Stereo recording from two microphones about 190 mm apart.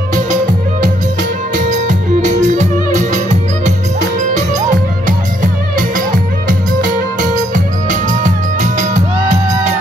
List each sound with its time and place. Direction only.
1.6 s music: 40° right (ahead or behind)